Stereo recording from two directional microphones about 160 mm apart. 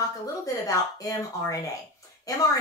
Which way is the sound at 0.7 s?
20° left (ahead or behind).